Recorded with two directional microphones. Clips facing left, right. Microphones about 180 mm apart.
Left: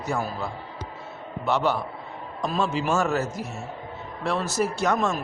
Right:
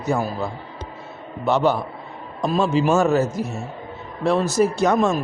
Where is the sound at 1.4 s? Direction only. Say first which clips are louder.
Right 5 dB; 20° right (ahead or behind).